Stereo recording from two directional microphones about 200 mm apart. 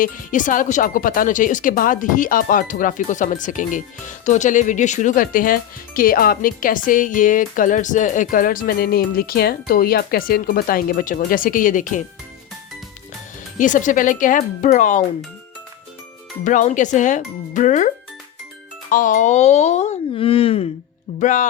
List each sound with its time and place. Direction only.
0.0 s speech: 40° left (ahead or behind)
13.6 s speech: 40° left (ahead or behind)
16.4 s speech: 40° left (ahead or behind)